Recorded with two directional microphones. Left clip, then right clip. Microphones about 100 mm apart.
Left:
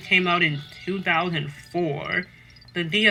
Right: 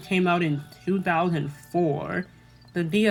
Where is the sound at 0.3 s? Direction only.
50° right (ahead or behind).